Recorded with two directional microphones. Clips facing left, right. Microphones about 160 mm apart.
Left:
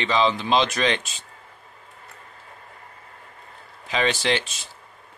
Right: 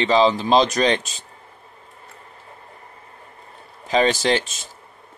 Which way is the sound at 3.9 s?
40° right (ahead or behind).